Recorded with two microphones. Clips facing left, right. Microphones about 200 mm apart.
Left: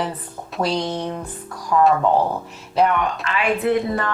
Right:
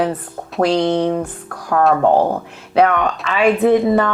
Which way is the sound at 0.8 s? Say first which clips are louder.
Right 9 dB; 85° right.